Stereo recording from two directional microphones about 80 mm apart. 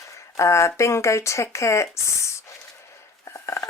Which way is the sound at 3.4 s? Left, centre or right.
Left.